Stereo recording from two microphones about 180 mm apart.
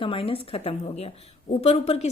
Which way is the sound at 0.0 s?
30° left (ahead or behind).